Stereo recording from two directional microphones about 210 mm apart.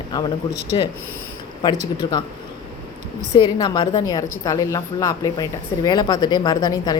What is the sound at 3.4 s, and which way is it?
A woman's voice, 20° left (ahead or behind).